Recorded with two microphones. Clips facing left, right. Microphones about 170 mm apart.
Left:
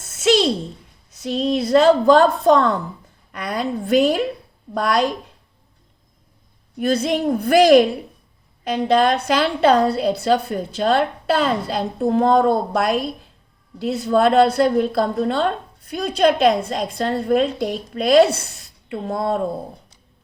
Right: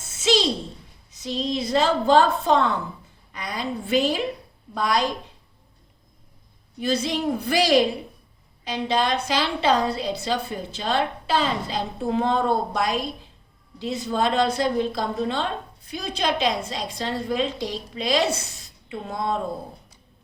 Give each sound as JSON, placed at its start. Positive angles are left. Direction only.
{"t": 0.1, "sound": "a sound", "side_deg": 60}
{"t": 1.2, "sound": "a woman's voice", "side_deg": 60}
{"t": 6.7, "sound": "a woman's voice", "side_deg": 60}